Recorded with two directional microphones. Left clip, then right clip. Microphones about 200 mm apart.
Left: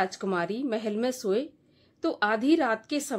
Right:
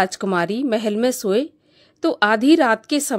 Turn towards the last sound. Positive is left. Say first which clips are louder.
# right 9 dB
turn(degrees=-35)  # may be behind; listen again after turning